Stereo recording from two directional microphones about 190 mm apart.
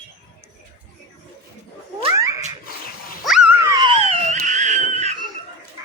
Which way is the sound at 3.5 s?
15° right (ahead or behind).